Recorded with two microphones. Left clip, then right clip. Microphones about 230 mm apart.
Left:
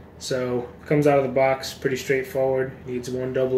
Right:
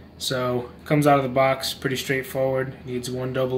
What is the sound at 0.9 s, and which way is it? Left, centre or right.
Speech, right.